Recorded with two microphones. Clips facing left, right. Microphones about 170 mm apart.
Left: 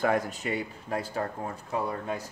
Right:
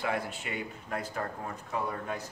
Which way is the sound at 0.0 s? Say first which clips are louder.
Left 6 dB; 45° left (ahead or behind).